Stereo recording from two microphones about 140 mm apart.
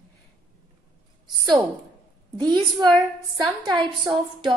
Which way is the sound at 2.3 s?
30° right (ahead or behind).